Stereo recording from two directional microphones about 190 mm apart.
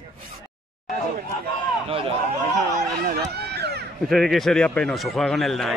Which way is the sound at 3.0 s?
55° right (ahead or behind).